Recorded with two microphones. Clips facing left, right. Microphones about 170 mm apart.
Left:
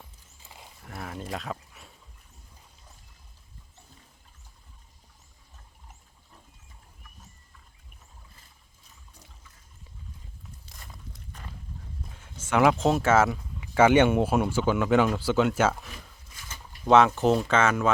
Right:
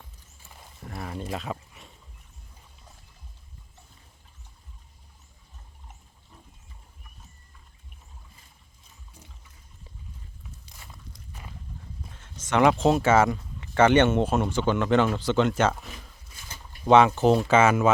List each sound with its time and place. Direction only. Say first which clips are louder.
0.4 s wild animals: left 1 dB; 15° left (ahead or behind)
0.9 s a sound: right 2 dB; centre (ahead or behind)
10.8 s walk: left 3 dB; 5° right (ahead or behind)
12.0 s speech: right 1 dB; 5° left (ahead or behind)
16.8 s speech: right 2 dB; 5° right (ahead or behind)